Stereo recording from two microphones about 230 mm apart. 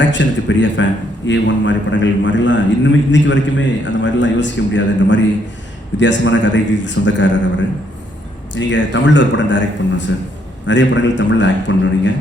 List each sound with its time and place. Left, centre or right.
0.0 s a man's voice: left
8.5 s a man's voice: left